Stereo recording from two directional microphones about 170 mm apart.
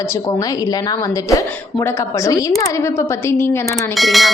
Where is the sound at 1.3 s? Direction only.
20° left (ahead or behind).